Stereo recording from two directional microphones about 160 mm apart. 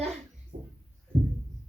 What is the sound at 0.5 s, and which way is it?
Speech, 45° right (ahead or behind).